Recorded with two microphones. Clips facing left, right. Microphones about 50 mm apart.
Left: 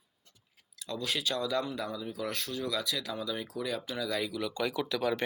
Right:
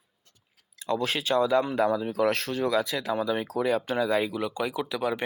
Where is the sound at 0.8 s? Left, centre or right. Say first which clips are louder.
Right 7 dB; right.